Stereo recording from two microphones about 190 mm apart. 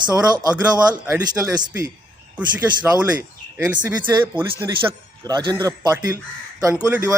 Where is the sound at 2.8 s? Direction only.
10° right (ahead or behind).